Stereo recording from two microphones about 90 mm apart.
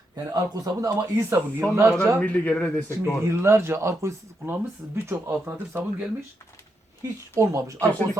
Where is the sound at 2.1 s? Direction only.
15° left (ahead or behind).